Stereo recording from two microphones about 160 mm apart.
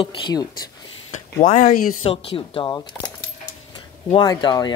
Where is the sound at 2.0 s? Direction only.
35° left (ahead or behind).